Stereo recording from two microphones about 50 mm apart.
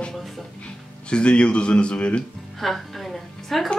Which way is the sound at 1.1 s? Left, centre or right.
Left.